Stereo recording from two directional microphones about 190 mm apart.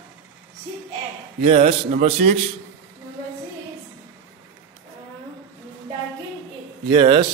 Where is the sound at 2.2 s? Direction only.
40° right (ahead or behind).